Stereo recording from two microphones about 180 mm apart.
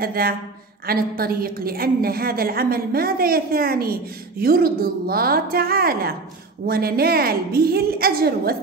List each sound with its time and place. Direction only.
0.0 s a woman's voice: 55° right (ahead or behind)